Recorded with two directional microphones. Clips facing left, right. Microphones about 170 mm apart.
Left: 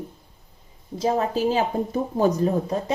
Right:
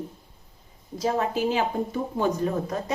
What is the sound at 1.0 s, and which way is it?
A woman's voice, 35° left (ahead or behind).